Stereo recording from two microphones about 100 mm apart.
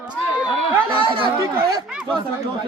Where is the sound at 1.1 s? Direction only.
60° right (ahead or behind).